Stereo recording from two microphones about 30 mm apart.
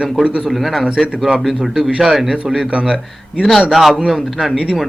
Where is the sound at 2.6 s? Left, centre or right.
Right.